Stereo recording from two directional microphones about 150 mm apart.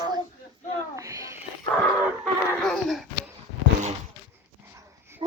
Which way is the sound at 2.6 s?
Centre (ahead or behind).